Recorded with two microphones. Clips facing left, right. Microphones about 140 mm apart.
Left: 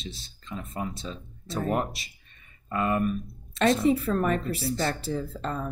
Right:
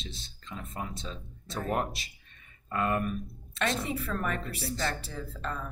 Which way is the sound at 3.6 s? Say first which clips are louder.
Left 9 dB; 35° left (ahead or behind).